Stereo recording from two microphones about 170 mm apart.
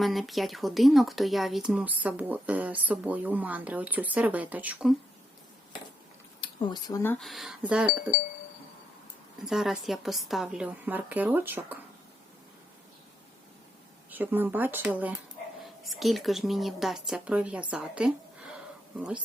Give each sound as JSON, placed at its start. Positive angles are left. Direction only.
{"t": 0.0, "sound": "speech", "side_deg": 0}
{"t": 6.4, "sound": "speech", "side_deg": 25}
{"t": 7.2, "sound": "a woman's voice", "side_deg": 0}
{"t": 9.4, "sound": "a woman's voice", "side_deg": 0}
{"t": 14.1, "sound": "a woman's voice", "side_deg": -10}